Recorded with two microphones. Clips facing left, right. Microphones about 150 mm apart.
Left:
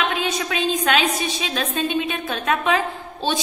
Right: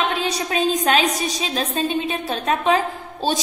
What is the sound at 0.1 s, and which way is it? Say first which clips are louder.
A woman's voice: right 1 dB; 35° right (ahead or behind).